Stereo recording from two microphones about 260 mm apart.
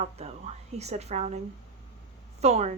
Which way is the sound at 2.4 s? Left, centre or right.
Right.